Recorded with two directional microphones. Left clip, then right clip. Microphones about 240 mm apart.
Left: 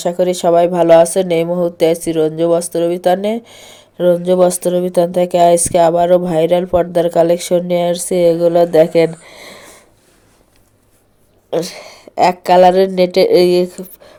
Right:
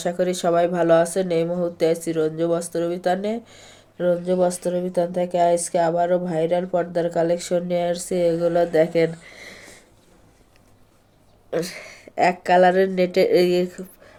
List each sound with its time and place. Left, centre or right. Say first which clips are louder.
0.0 s speech: left 8 dB; left
11.5 s a woman's voice: left 7 dB; centre